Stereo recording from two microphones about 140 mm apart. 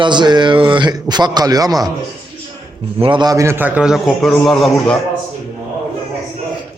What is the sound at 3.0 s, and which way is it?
A man's voice, 35° right (ahead or behind).